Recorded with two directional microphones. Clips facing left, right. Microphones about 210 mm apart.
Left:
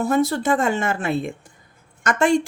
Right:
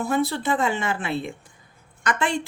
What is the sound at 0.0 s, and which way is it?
Speech, 45° left (ahead or behind).